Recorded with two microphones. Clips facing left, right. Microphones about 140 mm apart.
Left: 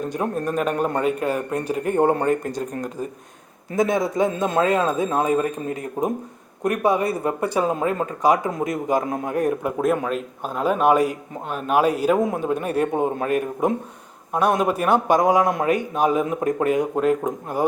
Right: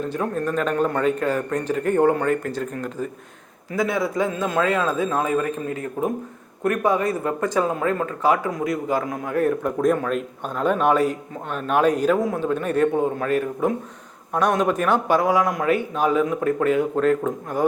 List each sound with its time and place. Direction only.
0.1 s a man's voice: 15° left (ahead or behind)
3.7 s a man's voice: 20° left (ahead or behind)